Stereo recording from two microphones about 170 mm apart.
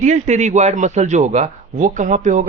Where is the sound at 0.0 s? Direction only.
45° right (ahead or behind).